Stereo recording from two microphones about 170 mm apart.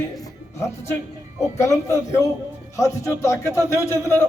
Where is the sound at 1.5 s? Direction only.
20° left (ahead or behind).